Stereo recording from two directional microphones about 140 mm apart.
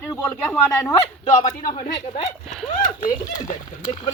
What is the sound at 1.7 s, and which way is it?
Speech, 35° left (ahead or behind).